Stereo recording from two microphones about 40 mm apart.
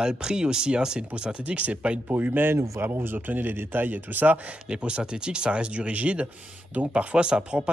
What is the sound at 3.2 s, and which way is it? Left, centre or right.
Speech, right.